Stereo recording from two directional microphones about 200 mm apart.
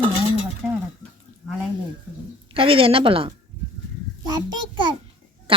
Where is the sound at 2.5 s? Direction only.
25° right (ahead or behind).